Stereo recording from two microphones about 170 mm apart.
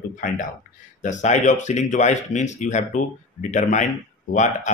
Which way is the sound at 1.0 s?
45° left (ahead or behind).